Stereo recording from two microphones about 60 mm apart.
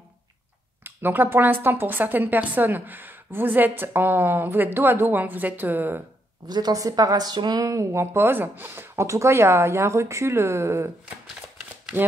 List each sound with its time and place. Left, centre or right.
0.8 s a woman's voice: right
6.7 s a woman's voice: right
9.0 s a woman's voice: right